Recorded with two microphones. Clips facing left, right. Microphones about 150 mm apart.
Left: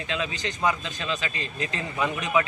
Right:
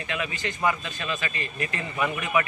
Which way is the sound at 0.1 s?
20° left (ahead or behind).